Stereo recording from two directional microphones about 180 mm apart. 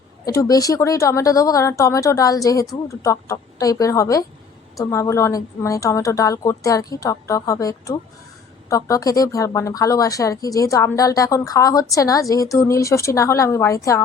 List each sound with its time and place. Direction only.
0.3 s a woman's voice: 20° left (ahead or behind)